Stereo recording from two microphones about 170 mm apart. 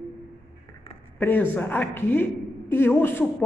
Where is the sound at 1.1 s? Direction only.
10° left (ahead or behind).